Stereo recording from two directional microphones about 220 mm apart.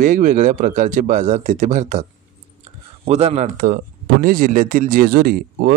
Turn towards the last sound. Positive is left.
turn(degrees=-40)  # may be behind; listen again after turning